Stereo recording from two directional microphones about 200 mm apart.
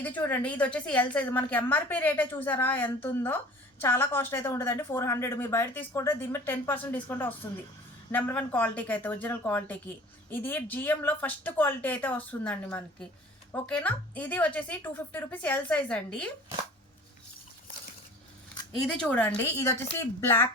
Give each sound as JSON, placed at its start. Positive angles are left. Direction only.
{"t": 0.2, "sound": "a woman's voice", "side_deg": 5}
{"t": 18.9, "sound": "a woman's voice", "side_deg": 5}